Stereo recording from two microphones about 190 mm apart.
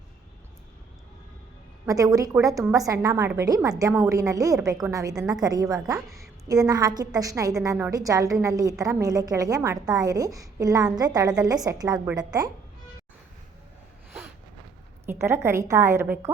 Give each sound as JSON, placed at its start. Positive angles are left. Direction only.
{"t": 1.9, "sound": "a woman's voice", "side_deg": -20}
{"t": 15.0, "sound": "a woman's voice", "side_deg": -15}